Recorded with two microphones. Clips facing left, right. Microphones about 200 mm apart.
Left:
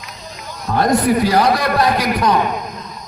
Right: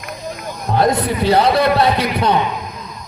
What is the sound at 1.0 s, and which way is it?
A man's voice, 25° right (ahead or behind).